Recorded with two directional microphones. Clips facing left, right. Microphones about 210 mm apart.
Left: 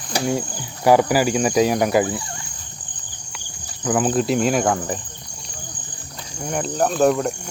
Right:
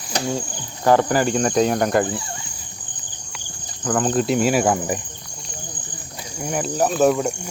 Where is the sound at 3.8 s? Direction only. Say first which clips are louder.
Left 1 dB; 5° left (ahead or behind); by 5.0 s 10° right (ahead or behind).